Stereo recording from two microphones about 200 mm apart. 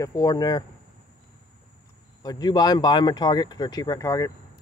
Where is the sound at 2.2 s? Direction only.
20° left (ahead or behind).